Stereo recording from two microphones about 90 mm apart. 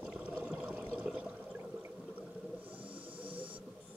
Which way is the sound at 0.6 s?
5° right (ahead or behind).